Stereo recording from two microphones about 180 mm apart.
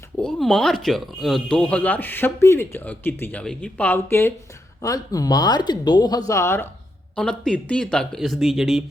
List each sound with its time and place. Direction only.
0.2 s speech: 5° left (ahead or behind)